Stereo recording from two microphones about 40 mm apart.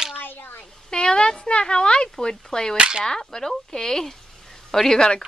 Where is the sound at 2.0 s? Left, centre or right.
Centre.